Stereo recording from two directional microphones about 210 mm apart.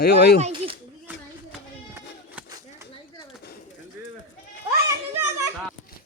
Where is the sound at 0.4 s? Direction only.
25° right (ahead or behind).